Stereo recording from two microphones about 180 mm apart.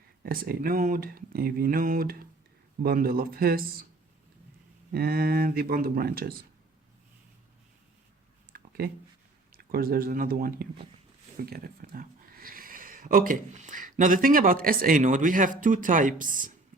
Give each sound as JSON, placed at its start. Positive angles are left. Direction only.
{"t": 0.3, "sound": "speech", "side_deg": -55}
{"t": 4.9, "sound": "speech", "side_deg": -60}
{"t": 9.5, "sound": "speech", "side_deg": -55}